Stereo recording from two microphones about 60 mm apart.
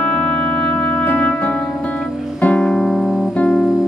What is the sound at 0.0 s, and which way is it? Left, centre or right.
Music, centre.